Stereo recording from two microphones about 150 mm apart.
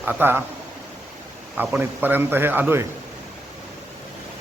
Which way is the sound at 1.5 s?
10° right (ahead or behind).